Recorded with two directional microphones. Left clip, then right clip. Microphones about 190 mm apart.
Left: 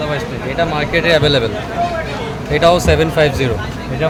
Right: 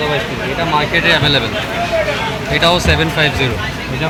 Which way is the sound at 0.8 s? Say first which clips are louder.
Right 1 dB; 70° left (ahead or behind).